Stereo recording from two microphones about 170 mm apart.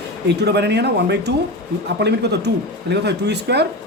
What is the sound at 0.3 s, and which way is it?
Speech, 80° right.